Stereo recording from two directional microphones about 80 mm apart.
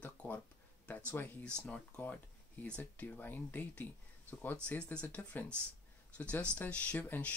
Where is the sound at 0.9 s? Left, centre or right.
Centre.